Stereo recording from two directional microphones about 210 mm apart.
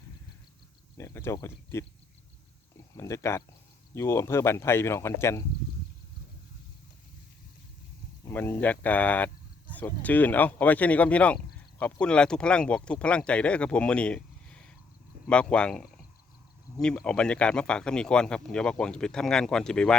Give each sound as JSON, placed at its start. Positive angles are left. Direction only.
{"t": 0.9, "sound": "speech", "side_deg": 10}
{"t": 3.0, "sound": "speech", "side_deg": 15}
{"t": 8.2, "sound": "speech", "side_deg": 10}